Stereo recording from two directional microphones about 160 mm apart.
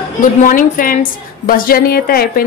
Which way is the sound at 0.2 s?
55° left (ahead or behind).